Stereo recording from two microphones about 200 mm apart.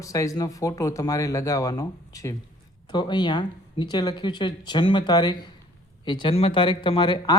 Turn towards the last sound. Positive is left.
turn(degrees=20)  # may be behind; listen again after turning